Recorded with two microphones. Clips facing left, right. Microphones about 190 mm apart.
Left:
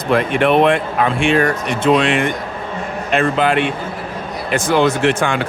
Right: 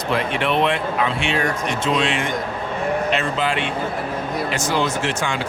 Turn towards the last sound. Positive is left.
turn(degrees=60)  # may be behind; listen again after turning